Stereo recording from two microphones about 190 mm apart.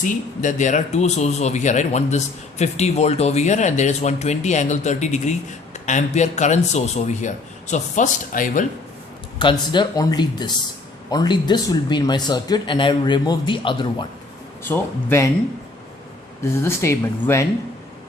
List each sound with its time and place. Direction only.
0.0 s speech: 40° left (ahead or behind)
9.4 s speech: 25° left (ahead or behind)
14.6 s speech: 15° left (ahead or behind)
16.4 s speech: 15° left (ahead or behind)